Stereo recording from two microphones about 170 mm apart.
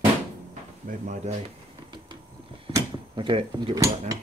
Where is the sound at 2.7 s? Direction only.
25° right (ahead or behind).